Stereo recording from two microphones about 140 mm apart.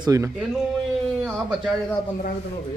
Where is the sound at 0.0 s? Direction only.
25° right (ahead or behind).